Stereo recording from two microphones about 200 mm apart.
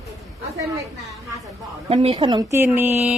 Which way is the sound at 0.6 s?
15° right (ahead or behind).